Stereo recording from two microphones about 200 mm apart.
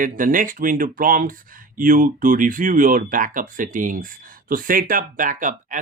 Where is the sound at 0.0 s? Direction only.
40° right (ahead or behind).